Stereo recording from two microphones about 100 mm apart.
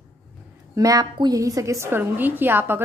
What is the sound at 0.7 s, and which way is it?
A woman's voice, 35° right (ahead or behind).